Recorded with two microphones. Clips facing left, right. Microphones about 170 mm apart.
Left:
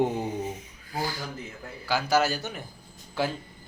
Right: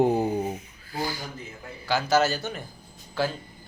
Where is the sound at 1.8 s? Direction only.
10° left (ahead or behind).